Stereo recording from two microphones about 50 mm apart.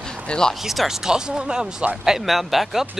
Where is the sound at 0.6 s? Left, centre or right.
Centre.